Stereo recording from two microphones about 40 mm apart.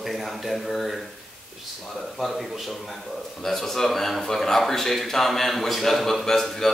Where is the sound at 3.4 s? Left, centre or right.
Centre.